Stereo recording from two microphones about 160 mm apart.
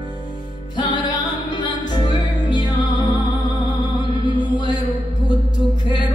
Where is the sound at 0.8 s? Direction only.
30° left (ahead or behind).